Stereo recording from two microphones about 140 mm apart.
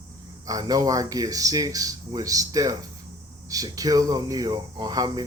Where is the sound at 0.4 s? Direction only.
25° right (ahead or behind).